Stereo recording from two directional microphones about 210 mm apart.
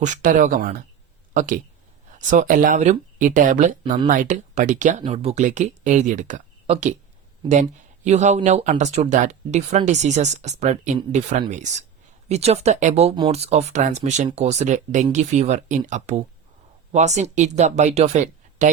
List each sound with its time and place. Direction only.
0.0 s speech: 40° right (ahead or behind)